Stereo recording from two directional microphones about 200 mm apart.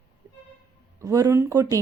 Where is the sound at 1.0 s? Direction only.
15° right (ahead or behind).